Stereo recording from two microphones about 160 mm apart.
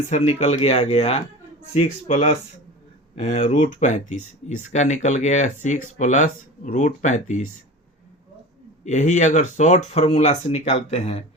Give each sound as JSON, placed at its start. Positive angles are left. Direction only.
{"t": 0.1, "sound": "speech", "side_deg": 45}
{"t": 3.4, "sound": "speech", "side_deg": 50}
{"t": 8.8, "sound": "speech", "side_deg": 45}